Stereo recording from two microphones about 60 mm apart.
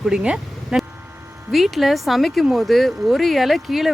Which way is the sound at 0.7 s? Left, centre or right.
Centre.